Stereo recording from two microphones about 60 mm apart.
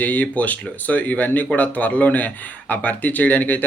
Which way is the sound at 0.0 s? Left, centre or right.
Left.